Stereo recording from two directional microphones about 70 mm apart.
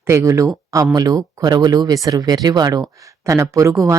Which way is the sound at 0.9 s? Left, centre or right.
Right.